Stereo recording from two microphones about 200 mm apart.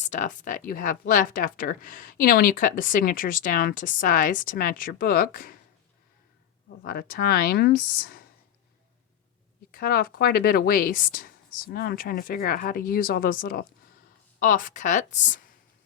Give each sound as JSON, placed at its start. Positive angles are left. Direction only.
{"t": 0.0, "sound": "speech", "side_deg": 35}
{"t": 6.8, "sound": "speech", "side_deg": 45}
{"t": 9.7, "sound": "speech", "side_deg": 50}